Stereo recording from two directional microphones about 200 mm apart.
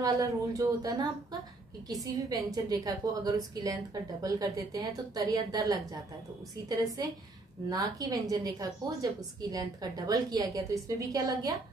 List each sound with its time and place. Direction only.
0.0 s a woman's voice: 15° right (ahead or behind)
7.0 s a woman's voice: 20° right (ahead or behind)